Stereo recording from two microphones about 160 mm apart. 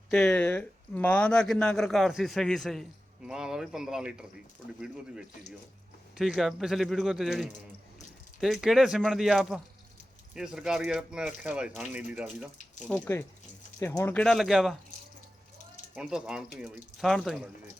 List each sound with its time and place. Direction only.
0.1 s speech: 5° left (ahead or behind)
6.1 s speech: centre (ahead or behind)
12.9 s speech: 15° left (ahead or behind); by 14.8 s centre (ahead or behind)
16.0 s speech: 5° right (ahead or behind)
17.1 s speech: 5° left (ahead or behind)